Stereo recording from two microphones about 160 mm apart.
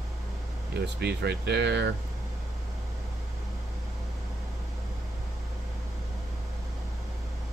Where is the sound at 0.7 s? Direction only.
90° right.